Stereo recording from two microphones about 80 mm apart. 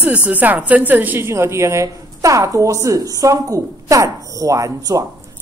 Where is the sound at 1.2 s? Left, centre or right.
Right.